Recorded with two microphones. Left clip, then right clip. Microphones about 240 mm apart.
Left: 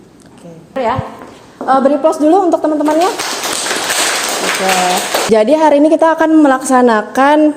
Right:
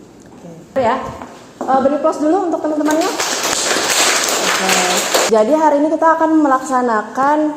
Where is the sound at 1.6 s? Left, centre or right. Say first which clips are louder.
Left 4 dB; left.